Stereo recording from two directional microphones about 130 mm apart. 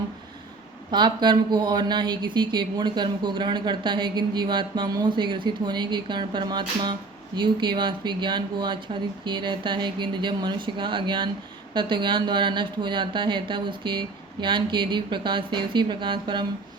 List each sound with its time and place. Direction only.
0.9 s speech: 35° right (ahead or behind)